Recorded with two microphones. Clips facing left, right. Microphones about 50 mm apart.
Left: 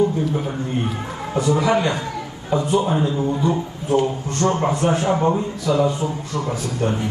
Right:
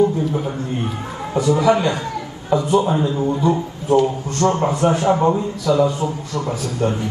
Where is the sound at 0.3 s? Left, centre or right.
Centre.